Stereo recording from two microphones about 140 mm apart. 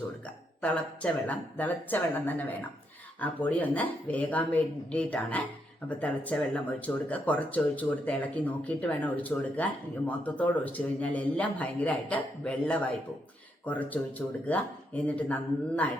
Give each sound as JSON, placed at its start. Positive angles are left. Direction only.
{"t": 0.6, "sound": "speech", "side_deg": 10}